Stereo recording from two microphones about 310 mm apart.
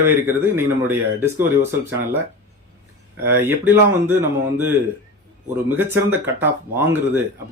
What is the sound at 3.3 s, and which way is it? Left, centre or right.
Speech, centre.